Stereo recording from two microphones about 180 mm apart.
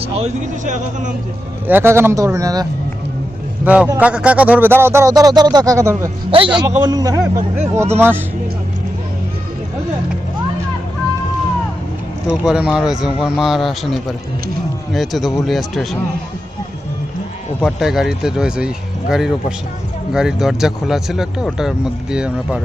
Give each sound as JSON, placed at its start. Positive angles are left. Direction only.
{"t": 0.0, "sound": "speech", "side_deg": -40}
{"t": 1.6, "sound": "speech", "side_deg": -10}
{"t": 3.6, "sound": "a man's voice", "side_deg": -10}
{"t": 6.3, "sound": "a man's voice", "side_deg": -30}
{"t": 12.5, "sound": "speech", "side_deg": -5}
{"t": 17.6, "sound": "speech", "side_deg": 0}